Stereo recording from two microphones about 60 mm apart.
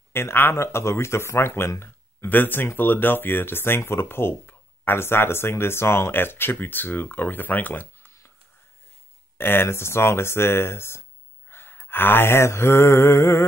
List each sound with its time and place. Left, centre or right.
0.1 s speech: left
9.4 s speech: left
11.5 s mantra: left